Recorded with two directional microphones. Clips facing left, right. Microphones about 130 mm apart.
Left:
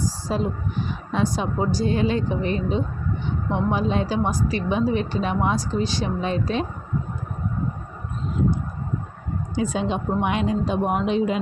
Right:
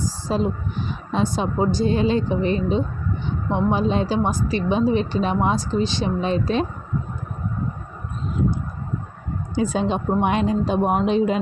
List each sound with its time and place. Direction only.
0.3 s speech: 30° right (ahead or behind)
9.6 s speech: 35° right (ahead or behind)